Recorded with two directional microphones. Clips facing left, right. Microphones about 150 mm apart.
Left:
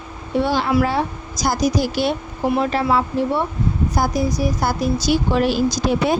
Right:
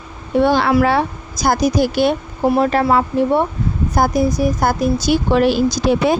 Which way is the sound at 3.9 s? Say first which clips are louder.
Right 6 dB; 55° right (ahead or behind).